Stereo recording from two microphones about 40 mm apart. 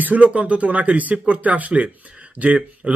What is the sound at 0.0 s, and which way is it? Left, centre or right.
Speech, right.